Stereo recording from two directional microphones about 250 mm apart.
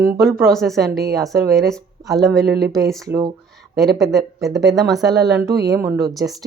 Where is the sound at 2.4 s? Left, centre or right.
Right.